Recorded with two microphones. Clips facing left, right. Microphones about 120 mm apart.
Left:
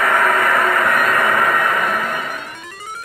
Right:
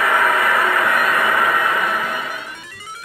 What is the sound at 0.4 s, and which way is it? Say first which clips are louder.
Music: left 1 dB; 40° left (ahead or behind).